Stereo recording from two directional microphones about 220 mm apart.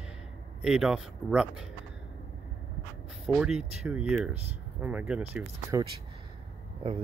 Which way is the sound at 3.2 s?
5° right (ahead or behind).